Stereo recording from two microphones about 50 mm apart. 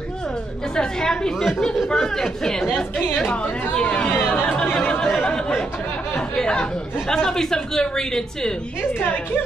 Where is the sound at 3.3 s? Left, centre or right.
Left.